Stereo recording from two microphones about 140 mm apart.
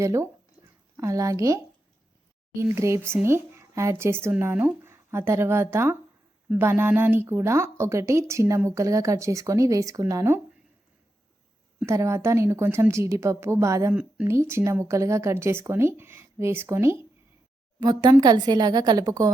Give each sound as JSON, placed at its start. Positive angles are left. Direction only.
{"t": 0.0, "sound": "speech", "side_deg": -20}
{"t": 11.9, "sound": "speech", "side_deg": -20}
{"t": 13.9, "sound": "speech", "side_deg": -10}
{"t": 17.7, "sound": "speech", "side_deg": -30}